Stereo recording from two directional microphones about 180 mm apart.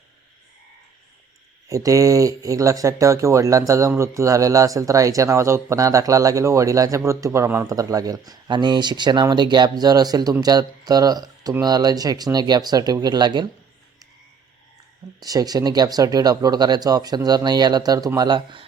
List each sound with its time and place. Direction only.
1.6 s speech: 20° right (ahead or behind)
15.2 s speech: 20° right (ahead or behind)